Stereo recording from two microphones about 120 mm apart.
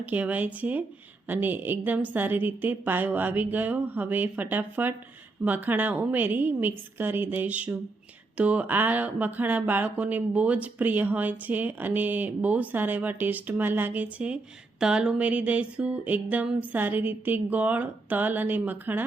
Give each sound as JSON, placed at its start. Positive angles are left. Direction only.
{"t": 0.0, "sound": "speech", "side_deg": -15}